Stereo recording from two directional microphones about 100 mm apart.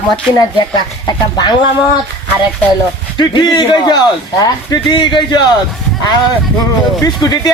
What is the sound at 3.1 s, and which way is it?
Speech, 45° left (ahead or behind).